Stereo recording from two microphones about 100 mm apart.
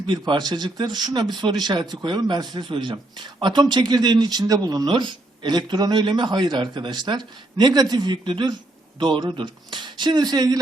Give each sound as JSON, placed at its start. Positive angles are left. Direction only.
{"t": 0.1, "sound": "speech", "side_deg": -45}